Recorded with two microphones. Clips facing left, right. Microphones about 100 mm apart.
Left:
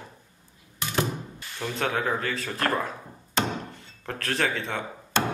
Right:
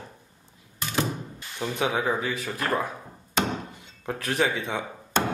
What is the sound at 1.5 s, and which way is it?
Speech, 15° right (ahead or behind).